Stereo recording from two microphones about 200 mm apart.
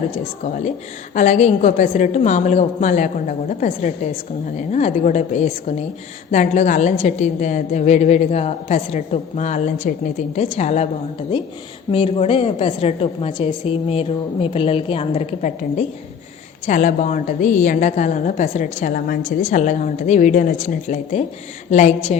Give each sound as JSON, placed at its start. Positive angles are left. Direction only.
{"t": 1.1, "sound": "a woman's voice", "side_deg": 35}
{"t": 11.9, "sound": "a woman's voice", "side_deg": 30}
{"t": 16.6, "sound": "a woman's voice", "side_deg": 40}